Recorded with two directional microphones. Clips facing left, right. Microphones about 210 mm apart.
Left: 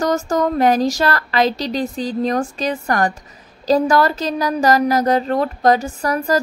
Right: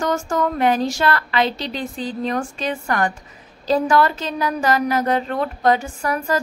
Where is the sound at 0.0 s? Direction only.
40° left (ahead or behind).